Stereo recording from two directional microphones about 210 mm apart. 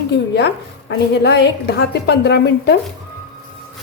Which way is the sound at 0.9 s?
55° left (ahead or behind).